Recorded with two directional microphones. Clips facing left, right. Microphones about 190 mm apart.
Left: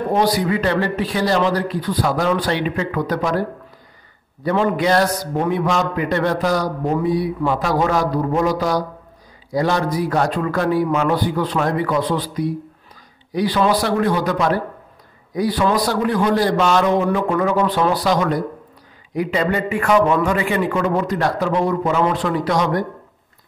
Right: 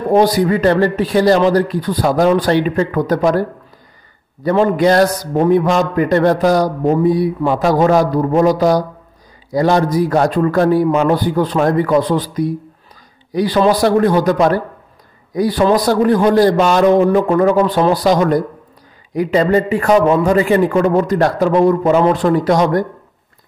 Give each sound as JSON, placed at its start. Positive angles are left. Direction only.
{"t": 0.1, "sound": "a man's voice", "side_deg": -45}
{"t": 4.5, "sound": "a man's voice", "side_deg": -40}